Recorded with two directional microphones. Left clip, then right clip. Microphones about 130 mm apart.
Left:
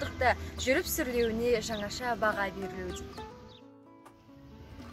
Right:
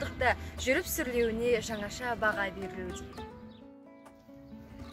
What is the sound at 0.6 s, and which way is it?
Speech, 50° right (ahead or behind).